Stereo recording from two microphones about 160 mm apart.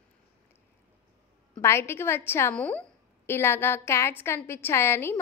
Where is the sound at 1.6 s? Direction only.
15° left (ahead or behind).